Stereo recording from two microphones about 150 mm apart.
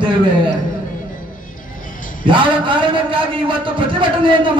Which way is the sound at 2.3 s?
35° right (ahead or behind).